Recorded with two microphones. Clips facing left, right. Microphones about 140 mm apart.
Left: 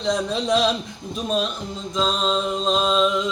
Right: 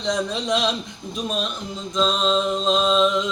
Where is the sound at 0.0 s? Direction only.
5° left (ahead or behind).